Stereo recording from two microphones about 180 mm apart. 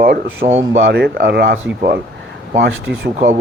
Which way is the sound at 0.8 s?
70° right (ahead or behind).